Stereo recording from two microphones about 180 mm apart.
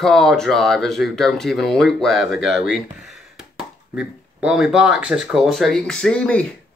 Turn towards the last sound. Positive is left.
turn(degrees=5)  # may be behind; listen again after turning